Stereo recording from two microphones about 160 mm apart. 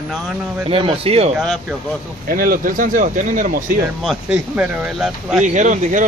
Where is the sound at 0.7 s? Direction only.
35° right (ahead or behind).